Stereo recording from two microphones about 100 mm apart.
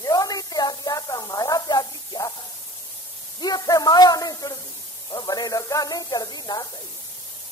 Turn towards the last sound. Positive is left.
turn(degrees=40)  # may be behind; listen again after turning